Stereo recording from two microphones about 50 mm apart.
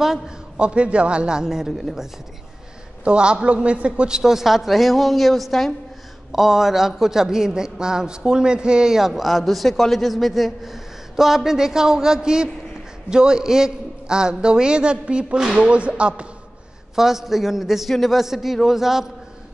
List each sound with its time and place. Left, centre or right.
0.6 s a man's voice: right
1.8 s a woman's voice: centre
3.0 s a man's voice: centre
4.2 s a woman's voice: centre
16.9 s a woman's voice: centre